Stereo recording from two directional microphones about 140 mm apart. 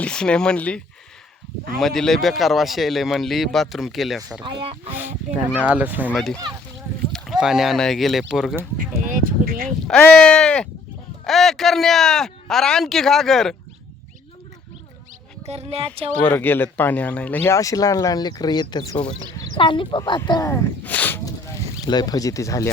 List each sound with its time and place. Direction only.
0.0 s speech: 5° left (ahead or behind)
1.8 s speech: centre (ahead or behind)
4.4 s speech: 35° right (ahead or behind)
4.9 s speech: 15° right (ahead or behind)
6.1 s speech: centre (ahead or behind)
9.0 s a sound: 85° right
9.6 s speech: 5° left (ahead or behind)
15.4 s speech: 50° right (ahead or behind)
16.2 s speech: 15° left (ahead or behind); by 20.5 s 30° left (ahead or behind)
20.5 s speech: 15° left (ahead or behind)
21.2 s a sound: 25° left (ahead or behind)